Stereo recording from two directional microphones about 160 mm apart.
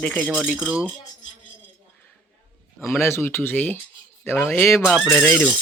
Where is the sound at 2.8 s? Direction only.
15° left (ahead or behind).